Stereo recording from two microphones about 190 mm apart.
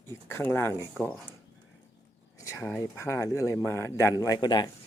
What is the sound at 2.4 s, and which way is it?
Speech, 15° left (ahead or behind).